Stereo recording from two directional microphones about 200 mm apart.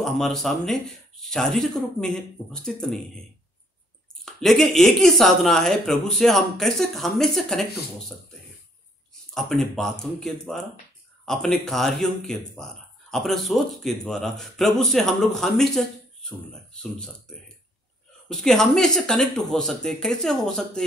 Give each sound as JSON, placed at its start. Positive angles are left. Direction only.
{"t": 0.0, "sound": "speech", "side_deg": 0}
{"t": 4.2, "sound": "speech", "side_deg": 0}
{"t": 9.3, "sound": "speech", "side_deg": 0}
{"t": 18.3, "sound": "speech", "side_deg": 0}